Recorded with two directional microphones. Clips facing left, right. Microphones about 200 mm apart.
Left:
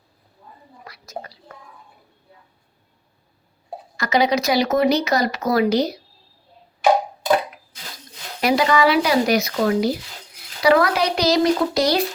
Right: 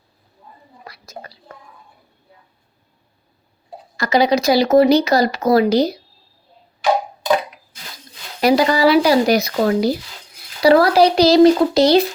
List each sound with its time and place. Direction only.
0.9 s whispering: 35° right (ahead or behind)
3.9 s speech: 35° right (ahead or behind)
8.4 s speech: 35° right (ahead or behind)